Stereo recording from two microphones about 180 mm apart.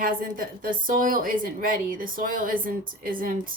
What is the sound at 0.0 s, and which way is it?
A woman's voice, 50° right (ahead or behind).